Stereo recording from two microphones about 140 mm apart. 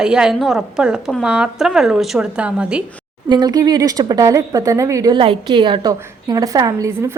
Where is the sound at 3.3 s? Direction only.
30° right (ahead or behind).